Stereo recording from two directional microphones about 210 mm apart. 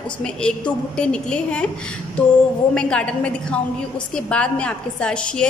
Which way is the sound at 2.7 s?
5° left (ahead or behind).